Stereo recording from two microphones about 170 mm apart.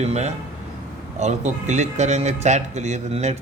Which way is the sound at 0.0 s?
40° right (ahead or behind).